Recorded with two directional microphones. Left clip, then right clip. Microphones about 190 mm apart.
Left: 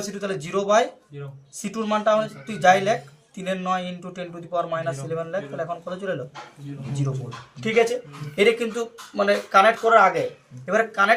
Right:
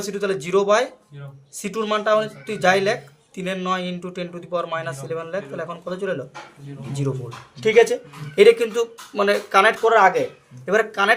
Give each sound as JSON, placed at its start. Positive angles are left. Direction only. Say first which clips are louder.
{"t": 0.0, "sound": "speech", "louder": "right 5 dB", "side_deg": -60}
{"t": 7.6, "sound": "speech", "louder": "right 5 dB", "side_deg": -60}